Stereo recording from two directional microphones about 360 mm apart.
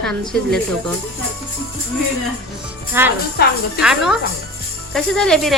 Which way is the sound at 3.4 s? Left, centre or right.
Left.